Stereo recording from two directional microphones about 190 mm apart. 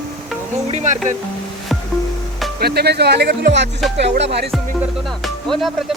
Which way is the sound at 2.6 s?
55° right (ahead or behind).